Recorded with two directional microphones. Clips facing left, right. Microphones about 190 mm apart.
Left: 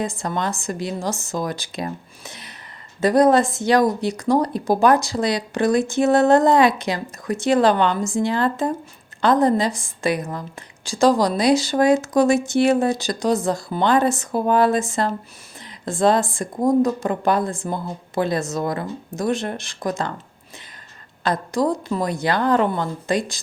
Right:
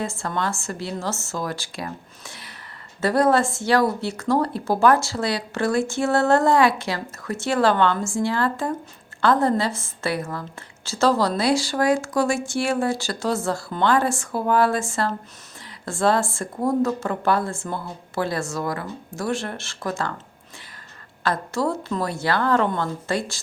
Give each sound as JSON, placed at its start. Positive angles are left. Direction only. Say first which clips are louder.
{"t": 0.0, "sound": "speech", "louder": "left 2 dB", "side_deg": 15}
{"t": 21.2, "sound": "speech", "louder": "left 3 dB", "side_deg": 15}